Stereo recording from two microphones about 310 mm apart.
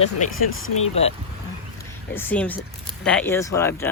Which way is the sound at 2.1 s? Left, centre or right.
Centre.